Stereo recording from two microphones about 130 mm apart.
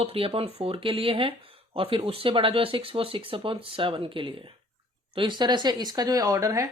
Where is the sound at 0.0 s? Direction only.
45° right (ahead or behind).